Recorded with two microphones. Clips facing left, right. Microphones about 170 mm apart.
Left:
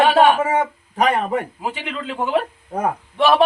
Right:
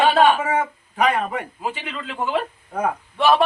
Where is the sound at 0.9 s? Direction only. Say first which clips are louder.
Left 2 dB; 35° left (ahead or behind).